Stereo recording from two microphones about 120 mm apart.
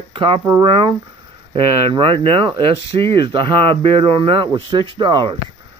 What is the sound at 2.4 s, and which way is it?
Speech, 45° right (ahead or behind).